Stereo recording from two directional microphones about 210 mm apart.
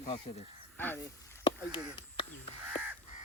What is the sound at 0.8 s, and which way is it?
Speech, 10° left (ahead or behind).